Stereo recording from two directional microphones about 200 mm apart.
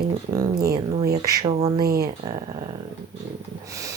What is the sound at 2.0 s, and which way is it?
Speech, 20° right (ahead or behind).